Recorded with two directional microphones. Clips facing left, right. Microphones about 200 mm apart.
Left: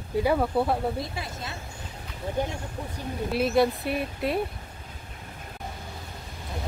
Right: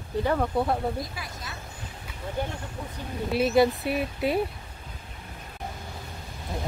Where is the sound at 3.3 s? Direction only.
Centre (ahead or behind).